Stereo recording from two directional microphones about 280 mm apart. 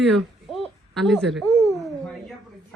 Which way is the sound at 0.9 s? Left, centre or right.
Centre.